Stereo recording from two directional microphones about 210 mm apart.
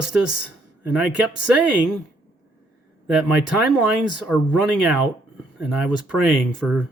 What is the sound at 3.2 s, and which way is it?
Speech, 5° right (ahead or behind).